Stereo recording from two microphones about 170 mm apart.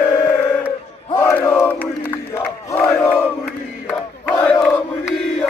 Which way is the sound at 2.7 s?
15° left (ahead or behind).